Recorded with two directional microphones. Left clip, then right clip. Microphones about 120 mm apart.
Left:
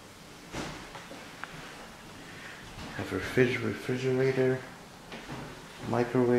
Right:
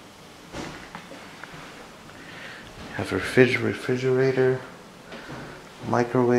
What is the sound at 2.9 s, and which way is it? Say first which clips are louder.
Speech: right 8 dB; 40° right (ahead or behind).